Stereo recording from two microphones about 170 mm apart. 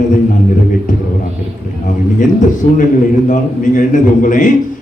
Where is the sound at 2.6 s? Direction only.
50° left (ahead or behind).